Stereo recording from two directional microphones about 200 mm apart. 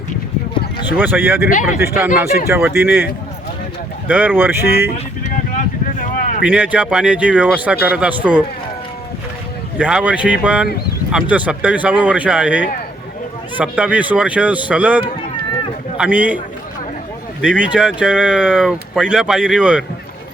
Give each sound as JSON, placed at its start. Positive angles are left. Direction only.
{"t": 0.9, "sound": "speech", "side_deg": -10}
{"t": 2.5, "sound": "speech", "side_deg": -10}
{"t": 4.1, "sound": "speech", "side_deg": -10}
{"t": 5.2, "sound": "a sound", "side_deg": 40}
{"t": 6.4, "sound": "speech", "side_deg": -5}
{"t": 9.7, "sound": "speech", "side_deg": -5}
{"t": 17.4, "sound": "speech", "side_deg": -5}